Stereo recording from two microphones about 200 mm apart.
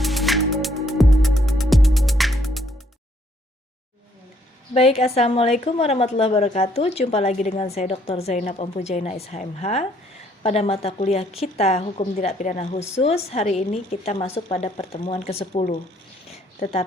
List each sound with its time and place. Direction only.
0.0 s music: centre (ahead or behind)
4.7 s a woman's voice: 30° left (ahead or behind)